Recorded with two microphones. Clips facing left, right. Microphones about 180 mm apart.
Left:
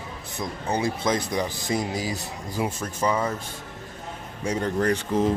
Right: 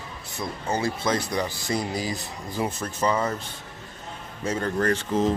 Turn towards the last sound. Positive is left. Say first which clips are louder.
# even
turn(degrees=15)  # may be behind; listen again after turning